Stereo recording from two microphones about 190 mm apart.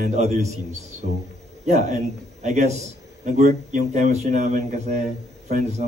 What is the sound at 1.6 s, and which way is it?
Speech, 35° right (ahead or behind).